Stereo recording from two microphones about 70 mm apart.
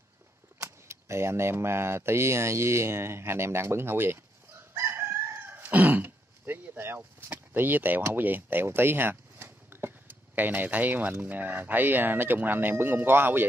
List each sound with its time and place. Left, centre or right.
0.6 s speech: right